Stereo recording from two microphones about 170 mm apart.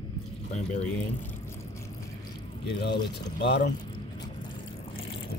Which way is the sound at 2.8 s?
80° left.